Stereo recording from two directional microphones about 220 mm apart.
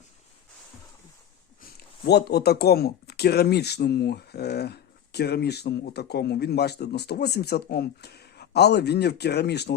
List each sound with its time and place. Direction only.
2.0 s speech: 45° left (ahead or behind)